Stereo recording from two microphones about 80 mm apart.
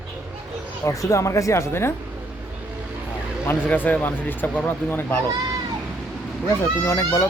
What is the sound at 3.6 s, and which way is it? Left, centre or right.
Speech, left.